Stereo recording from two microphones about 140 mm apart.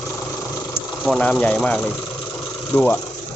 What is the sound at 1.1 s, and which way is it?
Speech, 10° left (ahead or behind).